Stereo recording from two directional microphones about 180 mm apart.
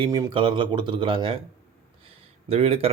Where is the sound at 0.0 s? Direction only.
25° right (ahead or behind).